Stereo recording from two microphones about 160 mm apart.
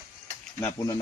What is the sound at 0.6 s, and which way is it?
Speech, 15° left (ahead or behind).